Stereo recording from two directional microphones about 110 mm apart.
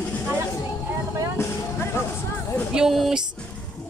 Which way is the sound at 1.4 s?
25° left (ahead or behind).